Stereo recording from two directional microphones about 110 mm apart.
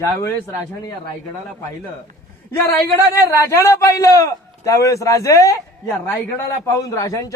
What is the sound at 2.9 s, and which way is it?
A man's voice, 25° left (ahead or behind).